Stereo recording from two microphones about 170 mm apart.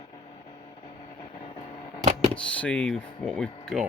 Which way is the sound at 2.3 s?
5° left (ahead or behind).